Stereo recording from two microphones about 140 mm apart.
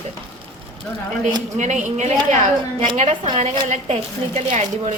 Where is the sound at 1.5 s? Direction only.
60° right (ahead or behind).